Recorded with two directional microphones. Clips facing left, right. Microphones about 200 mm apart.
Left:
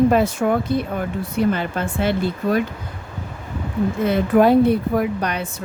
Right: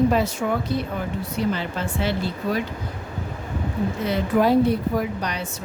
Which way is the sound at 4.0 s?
55° left (ahead or behind).